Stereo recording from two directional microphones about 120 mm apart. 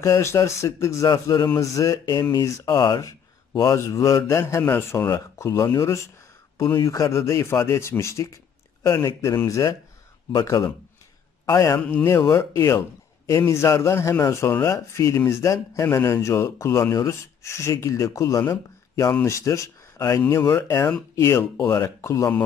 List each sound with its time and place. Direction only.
0.0 s a man's voice: 25° left (ahead or behind)
9.3 s speech: 15° left (ahead or behind)
10.3 s a man's voice: 30° left (ahead or behind)